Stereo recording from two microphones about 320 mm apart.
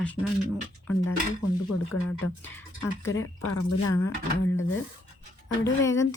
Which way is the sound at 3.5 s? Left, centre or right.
Left.